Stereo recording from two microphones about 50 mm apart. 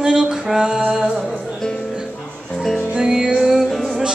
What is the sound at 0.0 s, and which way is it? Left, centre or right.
Music, centre.